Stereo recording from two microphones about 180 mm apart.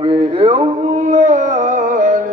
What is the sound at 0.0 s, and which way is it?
Carnatic music, 30° right (ahead or behind).